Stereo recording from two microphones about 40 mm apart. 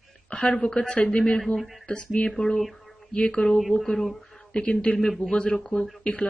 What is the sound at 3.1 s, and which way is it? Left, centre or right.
Speech, left.